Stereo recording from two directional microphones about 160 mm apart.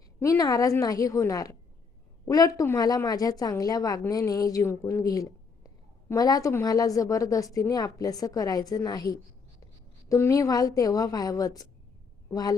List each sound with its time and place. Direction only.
0.2 s a woman's voice: 20° left (ahead or behind)